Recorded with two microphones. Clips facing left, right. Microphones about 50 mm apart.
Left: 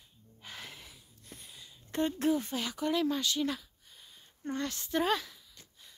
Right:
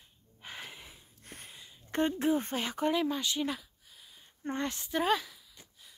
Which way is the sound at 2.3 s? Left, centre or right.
Right.